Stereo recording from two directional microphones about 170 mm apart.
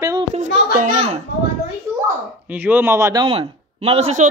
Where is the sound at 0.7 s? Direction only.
35° right (ahead or behind).